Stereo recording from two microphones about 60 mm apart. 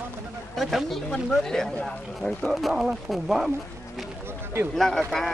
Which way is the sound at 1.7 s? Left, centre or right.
Centre.